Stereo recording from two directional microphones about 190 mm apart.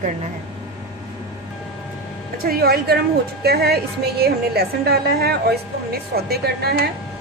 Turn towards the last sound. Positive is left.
turn(degrees=-55)  # may be behind; listen again after turning